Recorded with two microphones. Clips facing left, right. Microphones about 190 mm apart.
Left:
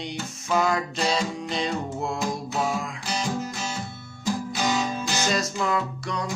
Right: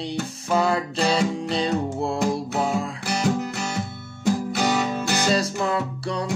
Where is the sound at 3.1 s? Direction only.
65° right (ahead or behind).